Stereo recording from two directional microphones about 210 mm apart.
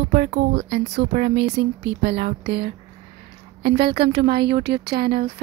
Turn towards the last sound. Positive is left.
turn(degrees=-45)  # may be behind; listen again after turning